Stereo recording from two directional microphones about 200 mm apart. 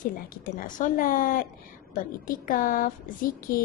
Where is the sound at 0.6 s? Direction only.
45° left (ahead or behind).